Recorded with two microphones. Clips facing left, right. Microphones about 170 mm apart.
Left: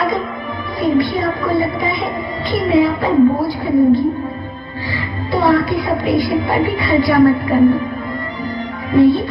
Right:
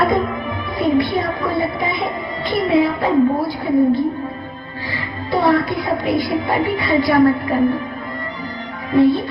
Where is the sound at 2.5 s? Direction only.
55° right (ahead or behind).